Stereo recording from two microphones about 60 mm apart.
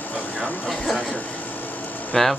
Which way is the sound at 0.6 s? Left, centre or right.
Centre.